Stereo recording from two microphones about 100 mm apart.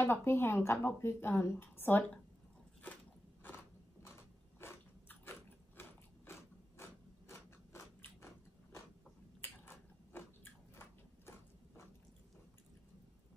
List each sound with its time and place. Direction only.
0.0 s a woman's voice: 25° left (ahead or behind)
4.6 s biting: 25° left (ahead or behind)
6.8 s biting: 30° left (ahead or behind)
9.4 s biting: 20° left (ahead or behind)